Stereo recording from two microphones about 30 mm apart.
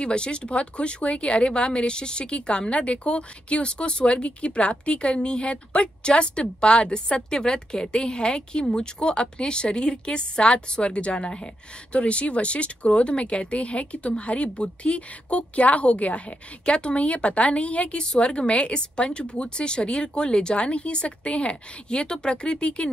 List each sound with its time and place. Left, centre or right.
0.0 s speech: left
16.6 s speech: left
18.0 s speech: left